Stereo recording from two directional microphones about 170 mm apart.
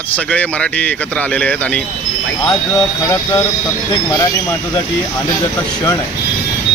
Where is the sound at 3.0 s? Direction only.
20° left (ahead or behind).